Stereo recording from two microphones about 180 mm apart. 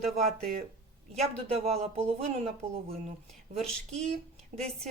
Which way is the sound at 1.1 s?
35° right (ahead or behind).